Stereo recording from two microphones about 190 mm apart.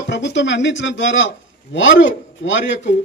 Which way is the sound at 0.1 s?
65° left (ahead or behind).